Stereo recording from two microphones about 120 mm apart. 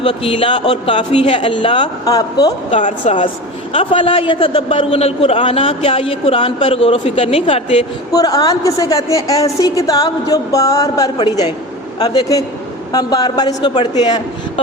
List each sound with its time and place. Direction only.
0.0 s a man's voice: 50° left (ahead or behind); by 2.5 s 30° left (ahead or behind)
2.6 s speech: 85° left
3.7 s a man's voice: 50° left (ahead or behind)
4.9 s a man's voice: 60° left (ahead or behind)
8.1 s a woman's voice: 30° left (ahead or behind)